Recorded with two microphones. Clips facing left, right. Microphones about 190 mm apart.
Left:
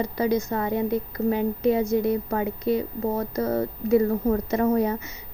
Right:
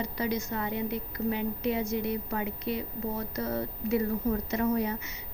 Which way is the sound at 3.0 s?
55° left (ahead or behind).